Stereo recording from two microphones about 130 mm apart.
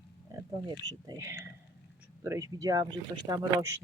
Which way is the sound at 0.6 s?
30° right (ahead or behind).